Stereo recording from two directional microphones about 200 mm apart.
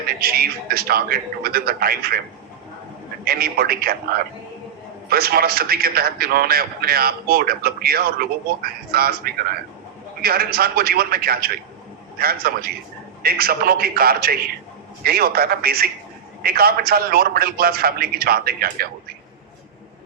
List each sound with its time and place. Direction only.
0.2 s a man's voice: 50° right (ahead or behind)
3.2 s a man's voice: 50° right (ahead or behind)
5.0 s a man's voice: 50° right (ahead or behind)